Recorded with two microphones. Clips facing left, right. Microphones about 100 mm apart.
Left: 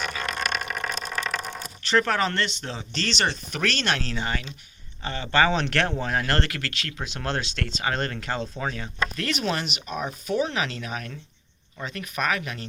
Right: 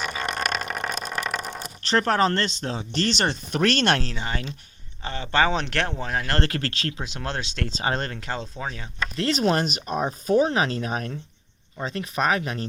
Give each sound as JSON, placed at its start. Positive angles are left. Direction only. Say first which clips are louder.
{"t": 0.0, "sound": "vehicle", "louder": "right 2 dB", "side_deg": -25}
{"t": 1.9, "sound": "speech", "louder": "right 2 dB", "side_deg": -40}
{"t": 4.0, "sound": "speech", "louder": "left 1 dB", "side_deg": -20}
{"t": 6.4, "sound": "speech", "louder": "right 5 dB", "side_deg": -35}
{"t": 6.9, "sound": "speech", "louder": "left 1 dB", "side_deg": -20}